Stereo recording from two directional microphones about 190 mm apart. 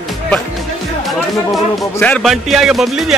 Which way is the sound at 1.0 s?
Centre (ahead or behind).